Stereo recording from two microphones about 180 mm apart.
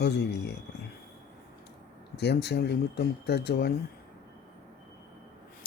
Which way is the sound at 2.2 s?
65° left (ahead or behind).